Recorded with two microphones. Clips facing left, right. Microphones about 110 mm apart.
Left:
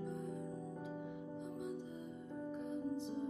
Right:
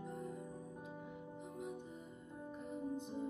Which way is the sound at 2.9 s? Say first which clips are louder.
Left 2 dB; 50° right (ahead or behind).